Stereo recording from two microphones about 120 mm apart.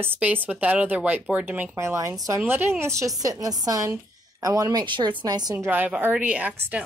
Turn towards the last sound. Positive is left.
turn(degrees=-15)  # may be behind; listen again after turning